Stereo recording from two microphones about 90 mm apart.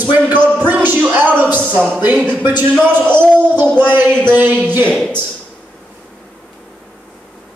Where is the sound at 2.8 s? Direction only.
20° right (ahead or behind).